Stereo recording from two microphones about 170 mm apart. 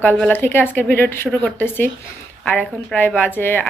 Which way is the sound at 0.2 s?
10° left (ahead or behind).